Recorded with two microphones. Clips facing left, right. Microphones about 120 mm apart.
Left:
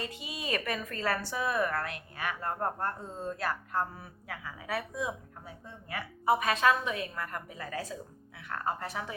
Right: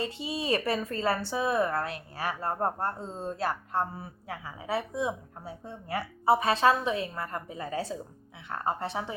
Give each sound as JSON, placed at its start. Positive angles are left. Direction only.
{"t": 0.0, "sound": "a woman's voice", "side_deg": -30}